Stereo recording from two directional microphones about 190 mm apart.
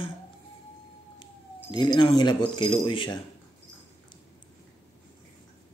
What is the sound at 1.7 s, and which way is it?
Speech, 25° left (ahead or behind).